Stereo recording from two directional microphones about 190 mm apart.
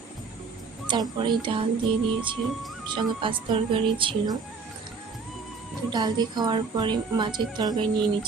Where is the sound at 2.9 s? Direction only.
25° right (ahead or behind).